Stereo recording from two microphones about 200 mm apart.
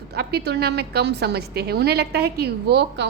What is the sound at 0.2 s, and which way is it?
A woman's voice, 55° right (ahead or behind).